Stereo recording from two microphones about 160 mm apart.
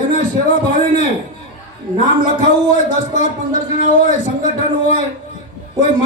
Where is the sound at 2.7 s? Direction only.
50° left (ahead or behind).